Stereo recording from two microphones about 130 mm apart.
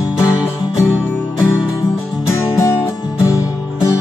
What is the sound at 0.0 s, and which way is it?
Music, 30° left (ahead or behind).